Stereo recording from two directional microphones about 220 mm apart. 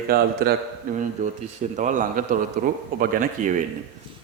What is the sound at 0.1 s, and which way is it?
Speech, 45° right (ahead or behind).